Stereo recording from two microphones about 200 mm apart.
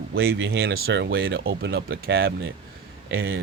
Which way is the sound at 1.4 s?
75° right (ahead or behind).